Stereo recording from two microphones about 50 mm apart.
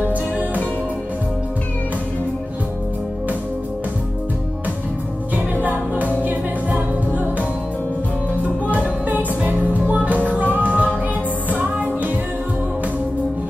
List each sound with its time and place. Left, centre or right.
5.3 s music: right